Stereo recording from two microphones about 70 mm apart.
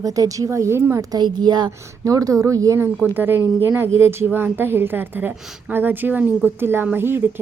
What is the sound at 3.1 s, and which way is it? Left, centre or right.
A woman's voice, right.